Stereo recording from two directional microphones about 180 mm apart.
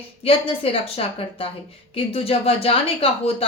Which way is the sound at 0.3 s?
30° left (ahead or behind).